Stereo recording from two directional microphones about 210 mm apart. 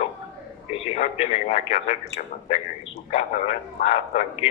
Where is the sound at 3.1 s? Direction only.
30° left (ahead or behind).